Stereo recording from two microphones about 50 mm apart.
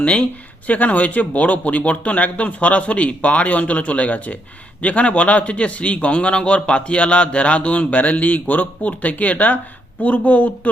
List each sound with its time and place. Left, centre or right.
0.7 s speech: left